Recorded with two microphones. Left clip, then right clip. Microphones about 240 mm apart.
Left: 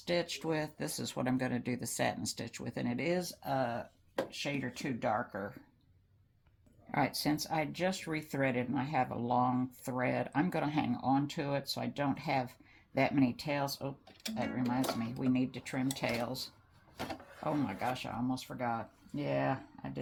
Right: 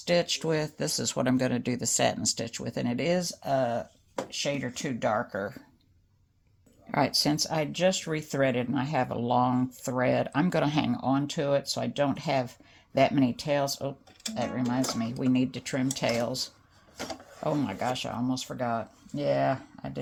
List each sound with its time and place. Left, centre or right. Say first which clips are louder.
0.0 s speech: right 8 dB; right
6.9 s speech: right 7 dB; right